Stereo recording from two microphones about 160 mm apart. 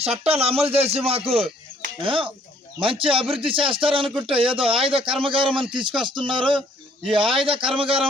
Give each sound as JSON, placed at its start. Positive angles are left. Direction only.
{"t": 0.0, "sound": "speech", "side_deg": -40}